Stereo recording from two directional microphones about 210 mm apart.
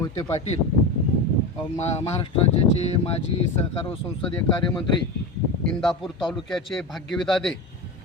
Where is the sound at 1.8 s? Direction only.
30° left (ahead or behind).